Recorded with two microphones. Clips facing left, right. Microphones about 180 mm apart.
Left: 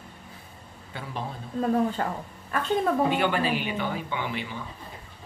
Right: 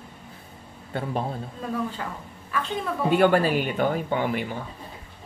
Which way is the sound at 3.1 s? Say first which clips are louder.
Right 5 dB; 45° right (ahead or behind).